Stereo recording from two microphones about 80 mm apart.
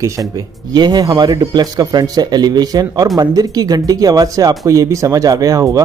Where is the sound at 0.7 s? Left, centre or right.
Right.